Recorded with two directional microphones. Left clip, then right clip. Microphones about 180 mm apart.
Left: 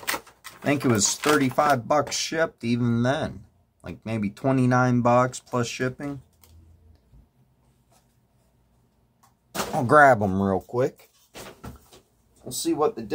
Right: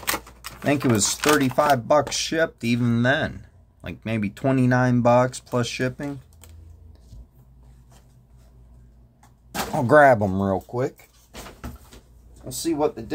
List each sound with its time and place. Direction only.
0.1 s a sound: 20° right (ahead or behind)
0.9 s speech: 5° right (ahead or behind)
9.8 s speech: 10° right (ahead or behind)
10.2 s speech: 5° left (ahead or behind)
12.4 s speech: 5° right (ahead or behind)